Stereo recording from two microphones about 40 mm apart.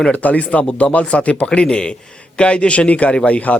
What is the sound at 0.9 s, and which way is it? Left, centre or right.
Speech, left.